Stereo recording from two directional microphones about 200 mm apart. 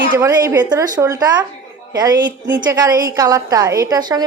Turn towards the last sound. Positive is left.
turn(degrees=-20)  # may be behind; listen again after turning